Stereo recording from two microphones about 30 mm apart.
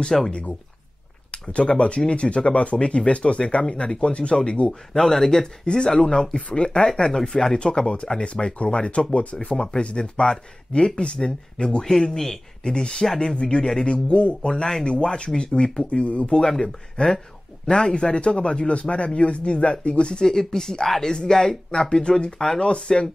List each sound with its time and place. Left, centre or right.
0.3 s speech: left
4.6 s speech: centre
5.9 s speech: left
7.1 s speech: centre
7.5 s speech: left
9.5 s a man's voice: left
11.1 s a man's voice: left
13.4 s speech: left
16.3 s a man's voice: left
20.2 s a man's voice: centre